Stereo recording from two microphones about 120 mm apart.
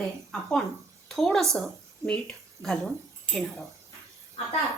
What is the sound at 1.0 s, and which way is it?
A woman's voice, centre (ahead or behind).